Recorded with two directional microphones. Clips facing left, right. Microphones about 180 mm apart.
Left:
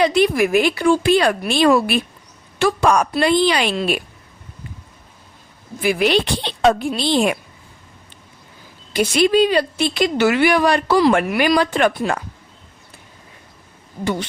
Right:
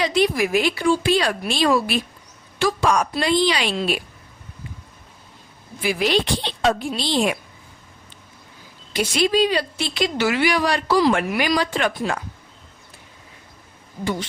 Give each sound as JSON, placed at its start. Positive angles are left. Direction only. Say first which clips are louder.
{"t": 0.0, "sound": "a woman's voice", "louder": "left 4 dB", "side_deg": 55}
{"t": 5.8, "sound": "a woman's voice", "louder": "left 4 dB", "side_deg": 55}
{"t": 8.9, "sound": "a woman's voice", "louder": "left 4 dB", "side_deg": 55}